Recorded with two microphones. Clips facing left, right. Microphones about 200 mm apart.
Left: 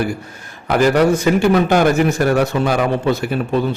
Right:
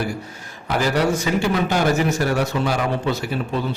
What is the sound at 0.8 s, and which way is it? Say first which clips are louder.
A man's voice: left 6 dB; 55° left (ahead or behind).